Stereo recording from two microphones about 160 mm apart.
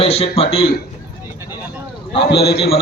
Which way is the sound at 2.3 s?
90° left.